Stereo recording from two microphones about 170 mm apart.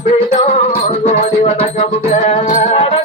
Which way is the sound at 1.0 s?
40° left (ahead or behind).